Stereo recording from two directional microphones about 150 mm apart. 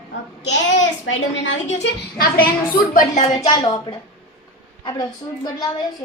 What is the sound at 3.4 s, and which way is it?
A woman's voice, 25° left (ahead or behind).